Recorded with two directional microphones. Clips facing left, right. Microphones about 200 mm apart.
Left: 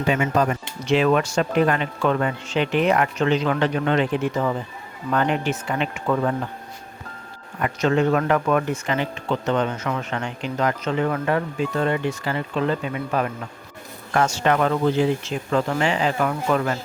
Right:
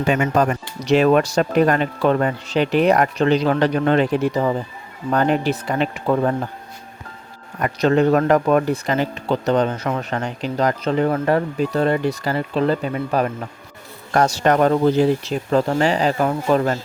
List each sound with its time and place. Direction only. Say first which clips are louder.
0.1 s speech: right 2 dB; 55° right (ahead or behind)
0.8 s speech: right 4 dB; 40° right (ahead or behind)
7.6 s speech: right 4 dB; 40° right (ahead or behind)